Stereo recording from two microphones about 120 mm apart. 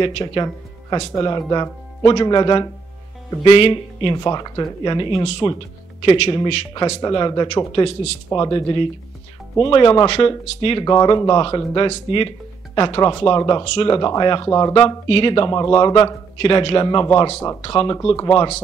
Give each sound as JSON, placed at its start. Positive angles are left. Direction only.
{"t": 0.0, "sound": "speech", "side_deg": 35}
{"t": 4.2, "sound": "speech", "side_deg": 30}
{"t": 5.9, "sound": "speech", "side_deg": 50}
{"t": 7.1, "sound": "speech", "side_deg": 35}
{"t": 13.4, "sound": "speech", "side_deg": 30}
{"t": 13.7, "sound": "speech", "side_deg": 45}
{"t": 13.9, "sound": "speech", "side_deg": 35}
{"t": 15.0, "sound": "speech", "side_deg": 45}
{"t": 16.3, "sound": "speech", "side_deg": 45}
{"t": 17.3, "sound": "speech", "side_deg": 20}
{"t": 17.6, "sound": "speech", "side_deg": 35}